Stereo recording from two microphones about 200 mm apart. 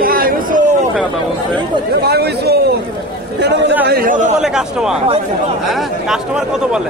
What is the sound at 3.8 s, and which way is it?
Speech, 50° right (ahead or behind).